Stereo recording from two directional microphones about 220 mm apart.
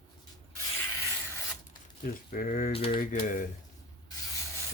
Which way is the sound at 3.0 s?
40° left (ahead or behind).